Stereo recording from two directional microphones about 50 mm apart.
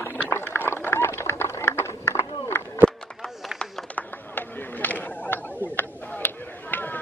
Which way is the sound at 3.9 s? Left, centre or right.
Left.